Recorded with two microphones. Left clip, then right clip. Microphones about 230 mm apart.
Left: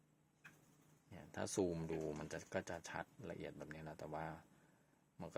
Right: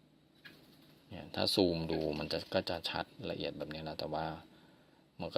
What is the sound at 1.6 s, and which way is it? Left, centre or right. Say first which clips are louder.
Speech: right 10 dB; right.